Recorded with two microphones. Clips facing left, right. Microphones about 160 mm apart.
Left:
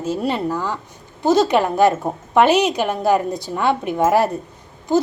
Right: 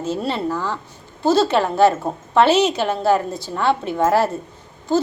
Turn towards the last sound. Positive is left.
turn(degrees=15)  # may be behind; listen again after turning